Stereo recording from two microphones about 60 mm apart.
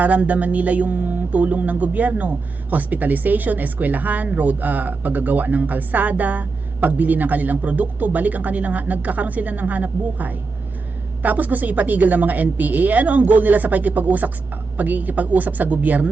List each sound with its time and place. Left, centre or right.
0.0 s speech: right